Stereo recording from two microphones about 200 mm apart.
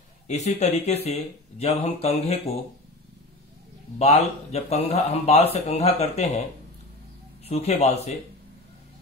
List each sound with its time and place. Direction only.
0.3 s speech: 35° left (ahead or behind)
4.0 s speech: 30° left (ahead or behind)
7.4 s speech: 30° left (ahead or behind)